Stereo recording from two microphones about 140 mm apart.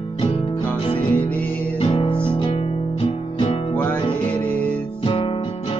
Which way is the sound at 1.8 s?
40° left (ahead or behind).